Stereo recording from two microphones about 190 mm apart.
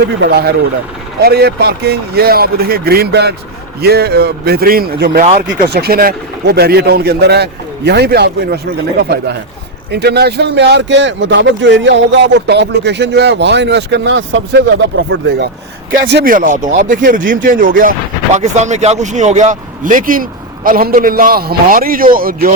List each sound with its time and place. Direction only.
0.2 s speech: 55° right (ahead or behind)
5.2 s a man's voice: 35° right (ahead or behind)
5.6 s speech: 55° right (ahead or behind)
16.3 s a man's voice: 45° right (ahead or behind)